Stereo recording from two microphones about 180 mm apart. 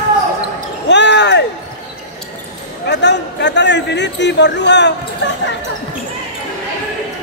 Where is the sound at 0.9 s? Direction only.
75° left (ahead or behind).